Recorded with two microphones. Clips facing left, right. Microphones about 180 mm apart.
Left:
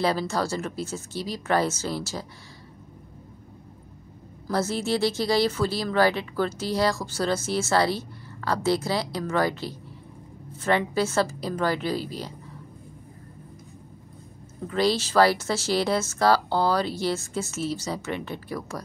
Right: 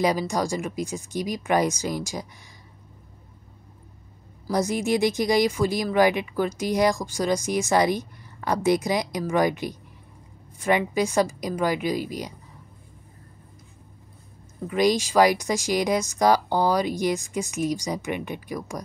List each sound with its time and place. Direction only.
0.0 s speech: 15° right (ahead or behind)
4.5 s speech: 15° right (ahead or behind)
14.7 s speech: 15° right (ahead or behind)